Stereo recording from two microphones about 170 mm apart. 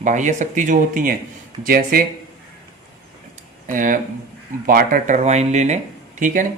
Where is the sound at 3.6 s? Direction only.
50° right (ahead or behind).